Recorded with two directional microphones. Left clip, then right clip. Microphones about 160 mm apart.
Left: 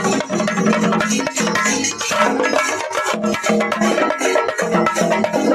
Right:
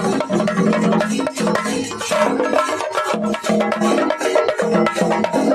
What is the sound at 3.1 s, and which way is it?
Music, 35° left (ahead or behind).